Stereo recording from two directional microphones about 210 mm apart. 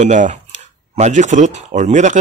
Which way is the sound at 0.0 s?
35° right (ahead or behind).